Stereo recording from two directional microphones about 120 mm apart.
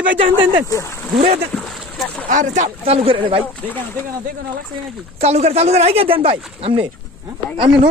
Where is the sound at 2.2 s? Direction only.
90° right.